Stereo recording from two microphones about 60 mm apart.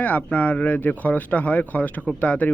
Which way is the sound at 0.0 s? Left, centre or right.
Left.